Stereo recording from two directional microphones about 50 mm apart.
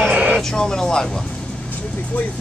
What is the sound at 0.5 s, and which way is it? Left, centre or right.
Speech, centre.